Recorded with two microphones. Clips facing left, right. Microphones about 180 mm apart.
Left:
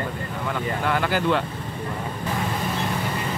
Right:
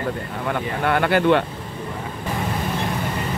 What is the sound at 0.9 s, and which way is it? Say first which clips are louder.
Speech: right 6 dB; 60° right (ahead or behind).